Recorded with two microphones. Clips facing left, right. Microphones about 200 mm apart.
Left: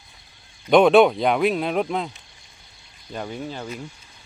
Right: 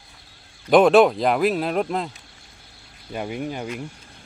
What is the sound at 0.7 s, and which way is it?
Speech, centre (ahead or behind).